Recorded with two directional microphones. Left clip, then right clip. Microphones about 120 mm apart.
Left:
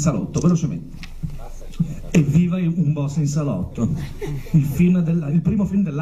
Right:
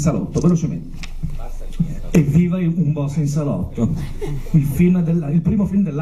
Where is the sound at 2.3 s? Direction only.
25° left (ahead or behind).